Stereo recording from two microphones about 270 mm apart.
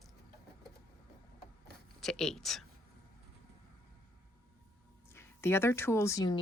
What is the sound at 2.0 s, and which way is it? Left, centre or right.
Speech, centre.